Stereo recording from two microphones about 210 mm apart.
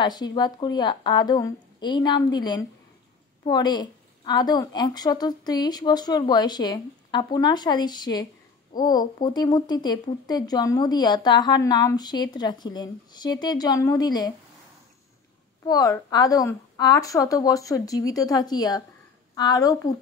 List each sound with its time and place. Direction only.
0.0 s speech: 20° left (ahead or behind)
15.6 s a woman's voice: 20° left (ahead or behind)